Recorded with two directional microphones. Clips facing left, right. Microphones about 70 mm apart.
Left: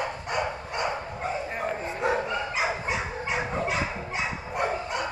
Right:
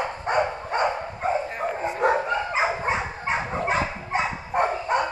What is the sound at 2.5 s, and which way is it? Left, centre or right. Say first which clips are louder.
Dog: right 4 dB; right.